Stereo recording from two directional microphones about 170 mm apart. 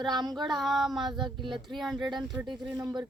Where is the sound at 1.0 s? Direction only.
25° right (ahead or behind).